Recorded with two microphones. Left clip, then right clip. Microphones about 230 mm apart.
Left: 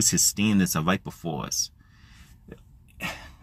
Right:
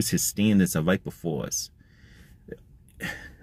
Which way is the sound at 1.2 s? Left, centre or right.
Left.